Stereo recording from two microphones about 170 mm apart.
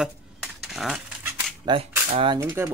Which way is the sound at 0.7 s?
Centre (ahead or behind).